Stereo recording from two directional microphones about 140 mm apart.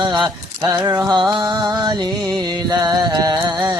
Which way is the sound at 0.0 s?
35° right (ahead or behind).